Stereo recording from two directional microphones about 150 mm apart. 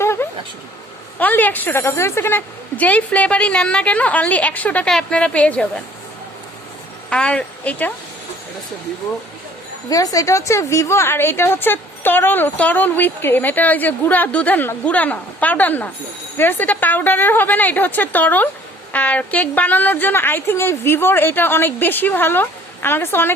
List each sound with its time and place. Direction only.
0.0 s a sound: 15° left (ahead or behind)
1.2 s a woman's voice: 10° left (ahead or behind)
7.1 s speech: 5° left (ahead or behind)
9.9 s a woman's voice: 25° left (ahead or behind)